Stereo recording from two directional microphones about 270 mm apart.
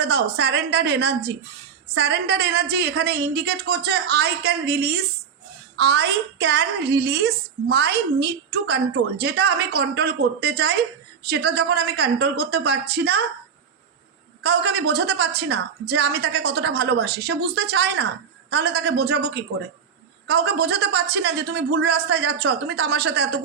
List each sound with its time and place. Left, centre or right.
0.0 s a woman's voice: right
14.4 s a woman's voice: right